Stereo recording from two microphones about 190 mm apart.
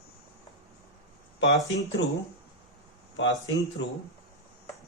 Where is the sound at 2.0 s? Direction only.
70° left (ahead or behind).